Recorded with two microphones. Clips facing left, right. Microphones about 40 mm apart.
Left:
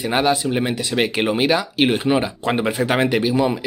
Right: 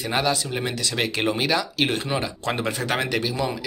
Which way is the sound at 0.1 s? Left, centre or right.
Left.